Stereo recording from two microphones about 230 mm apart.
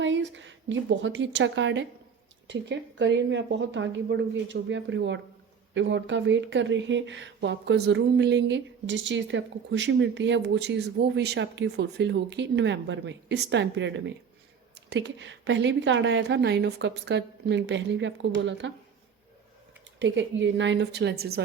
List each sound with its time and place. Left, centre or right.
0.0 s speech: right
20.0 s speech: right